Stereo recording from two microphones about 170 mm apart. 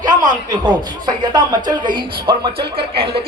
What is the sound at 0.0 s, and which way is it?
Speech, 25° right (ahead or behind).